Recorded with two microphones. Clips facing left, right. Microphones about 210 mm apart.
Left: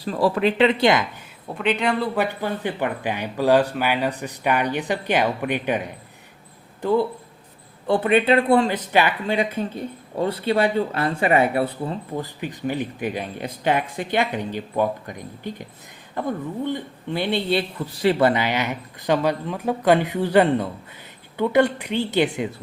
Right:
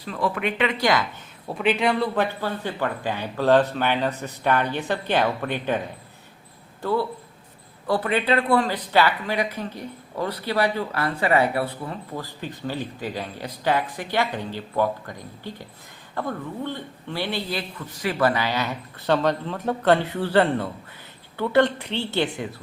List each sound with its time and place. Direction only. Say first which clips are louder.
0.0 s speech: left 6 dB; 35° left (ahead or behind)
1.5 s speech: even; centre (ahead or behind)
2.1 s a man's voice: left 1 dB; 15° left (ahead or behind)